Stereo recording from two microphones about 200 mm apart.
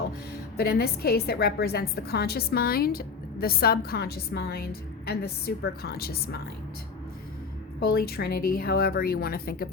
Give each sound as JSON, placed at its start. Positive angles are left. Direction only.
{"t": 0.5, "sound": "a woman's voice", "side_deg": 50}
{"t": 7.8, "sound": "a woman's voice", "side_deg": 50}